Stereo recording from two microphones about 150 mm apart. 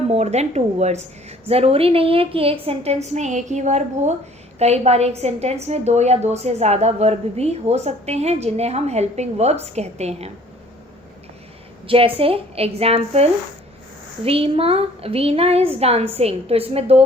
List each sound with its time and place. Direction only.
0.1 s a woman's voice: 45° right (ahead or behind)
11.9 s a woman's voice: 35° right (ahead or behind)
14.3 s a woman's voice: 40° right (ahead or behind)